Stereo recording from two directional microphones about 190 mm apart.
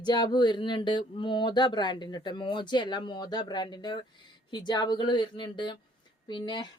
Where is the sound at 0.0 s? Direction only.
20° left (ahead or behind).